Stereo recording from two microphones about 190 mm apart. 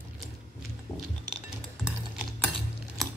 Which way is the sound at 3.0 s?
Centre (ahead or behind).